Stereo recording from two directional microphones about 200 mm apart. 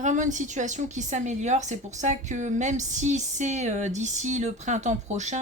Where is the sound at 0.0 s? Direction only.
40° right (ahead or behind).